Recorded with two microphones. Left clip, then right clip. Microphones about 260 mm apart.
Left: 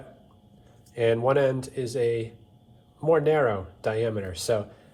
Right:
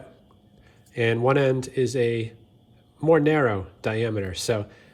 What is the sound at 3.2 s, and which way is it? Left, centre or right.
Speech, right.